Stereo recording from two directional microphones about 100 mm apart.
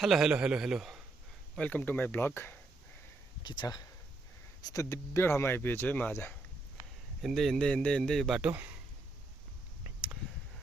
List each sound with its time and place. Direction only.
0.0 s a man's voice: 5° right (ahead or behind)
1.5 s speech: 15° left (ahead or behind)
3.4 s speech: 50° left (ahead or behind)
4.6 s speech: 35° left (ahead or behind); by 6.1 s 15° left (ahead or behind)
7.2 s a man's voice: centre (ahead or behind)
8.4 s speech: 15° right (ahead or behind)